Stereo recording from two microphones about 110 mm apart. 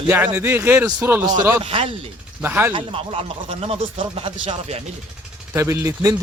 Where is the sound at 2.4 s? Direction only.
15° right (ahead or behind).